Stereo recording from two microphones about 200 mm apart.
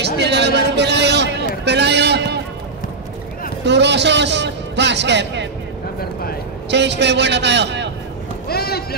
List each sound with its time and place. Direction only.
0.0 s speech: 55° right (ahead or behind)
3.6 s a man's voice: 60° right (ahead or behind)
6.7 s a man's voice: 60° right (ahead or behind)
8.5 s speech: 50° left (ahead or behind)